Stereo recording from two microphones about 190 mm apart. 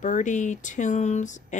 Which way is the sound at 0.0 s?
40° left (ahead or behind).